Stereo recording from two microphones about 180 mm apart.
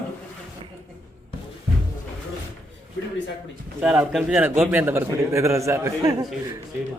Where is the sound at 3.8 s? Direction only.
5° right (ahead or behind).